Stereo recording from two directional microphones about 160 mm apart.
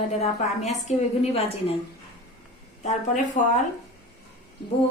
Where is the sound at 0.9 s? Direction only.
45° left (ahead or behind).